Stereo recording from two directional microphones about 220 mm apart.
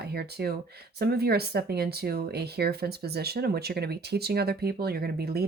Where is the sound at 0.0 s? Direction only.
45° right (ahead or behind).